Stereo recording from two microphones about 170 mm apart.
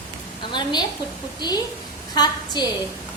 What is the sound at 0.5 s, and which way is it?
Speech, 25° left (ahead or behind).